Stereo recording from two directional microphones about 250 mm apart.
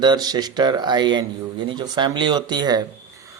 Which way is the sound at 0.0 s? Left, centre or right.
Centre.